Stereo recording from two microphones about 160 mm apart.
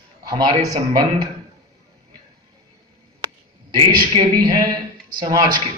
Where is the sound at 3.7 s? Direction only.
30° right (ahead or behind).